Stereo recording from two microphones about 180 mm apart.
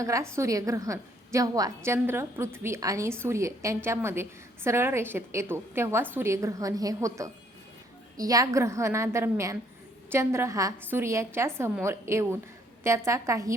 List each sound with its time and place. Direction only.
0.0 s a woman's voice: 15° right (ahead or behind)